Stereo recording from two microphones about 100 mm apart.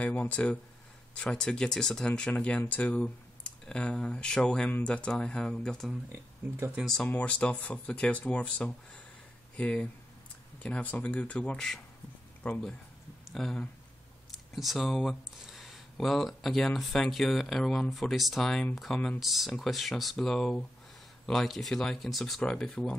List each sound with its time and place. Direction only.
0.0 s speech: 15° left (ahead or behind)
7.1 s speech: 15° left (ahead or behind)
14.3 s a sound: centre (ahead or behind)
15.4 s speech: centre (ahead or behind)